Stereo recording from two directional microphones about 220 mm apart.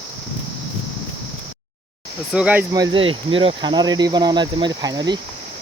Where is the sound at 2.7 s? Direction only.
20° right (ahead or behind).